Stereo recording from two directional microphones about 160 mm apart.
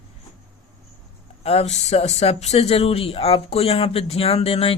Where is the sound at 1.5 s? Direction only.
40° left (ahead or behind).